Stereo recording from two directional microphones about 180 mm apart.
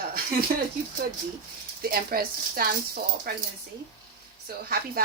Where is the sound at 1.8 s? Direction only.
55° right (ahead or behind).